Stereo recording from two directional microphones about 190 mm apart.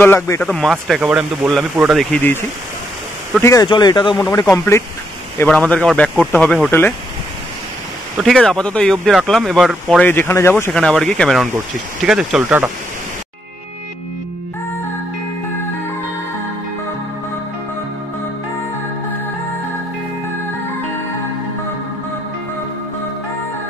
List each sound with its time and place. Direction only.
0.0 s speech: 10° left (ahead or behind)
3.3 s speech: 15° left (ahead or behind)
8.2 s speech: centre (ahead or behind)